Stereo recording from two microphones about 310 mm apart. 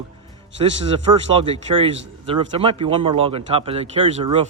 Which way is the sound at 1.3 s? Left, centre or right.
Centre.